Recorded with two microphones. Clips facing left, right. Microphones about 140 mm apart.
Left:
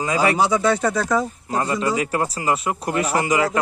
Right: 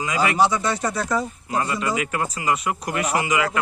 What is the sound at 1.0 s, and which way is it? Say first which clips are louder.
Speech: left 3 dB; 90° left.